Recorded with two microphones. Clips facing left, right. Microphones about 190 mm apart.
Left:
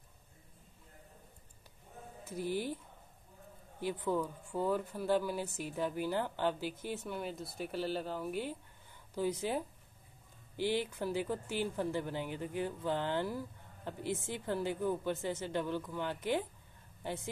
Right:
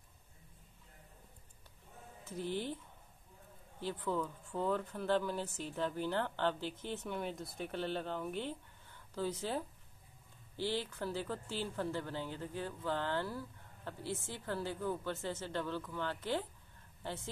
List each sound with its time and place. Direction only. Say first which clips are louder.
2.2 s speech: left 2 dB; 10° left (ahead or behind)
3.8 s speech: left 3 dB; 15° left (ahead or behind)